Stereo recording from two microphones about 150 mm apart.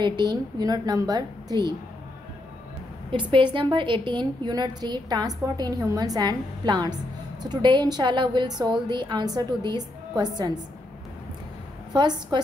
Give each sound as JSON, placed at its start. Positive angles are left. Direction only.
{"t": 0.0, "sound": "a woman's voice", "side_deg": -30}
{"t": 3.1, "sound": "a woman's voice", "side_deg": -35}
{"t": 11.9, "sound": "a woman's voice", "side_deg": -30}